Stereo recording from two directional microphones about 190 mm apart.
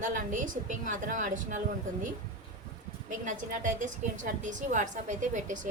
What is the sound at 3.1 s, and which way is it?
A woman's voice, 45° right (ahead or behind).